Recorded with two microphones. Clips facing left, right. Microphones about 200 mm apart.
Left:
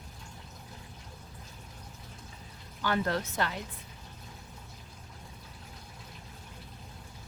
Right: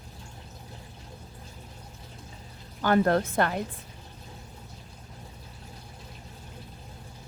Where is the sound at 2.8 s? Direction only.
50° right (ahead or behind).